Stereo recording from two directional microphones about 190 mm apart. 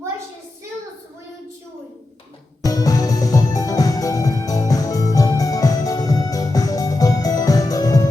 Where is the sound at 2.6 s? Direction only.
20° left (ahead or behind).